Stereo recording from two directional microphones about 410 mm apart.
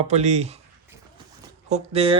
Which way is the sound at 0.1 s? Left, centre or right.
Centre.